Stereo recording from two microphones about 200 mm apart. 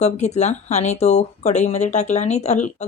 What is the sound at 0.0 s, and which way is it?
Speech, 35° left (ahead or behind).